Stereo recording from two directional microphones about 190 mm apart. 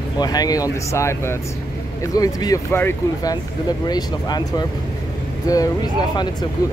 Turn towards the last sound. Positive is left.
turn(degrees=20)  # may be behind; listen again after turning